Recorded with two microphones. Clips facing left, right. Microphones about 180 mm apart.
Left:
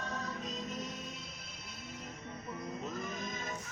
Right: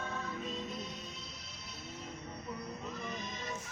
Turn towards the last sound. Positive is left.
turn(degrees=45)  # may be behind; listen again after turning